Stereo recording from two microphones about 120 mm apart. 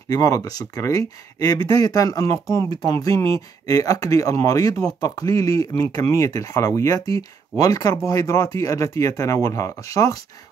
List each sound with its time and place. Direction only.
0.1 s speech: 30° left (ahead or behind)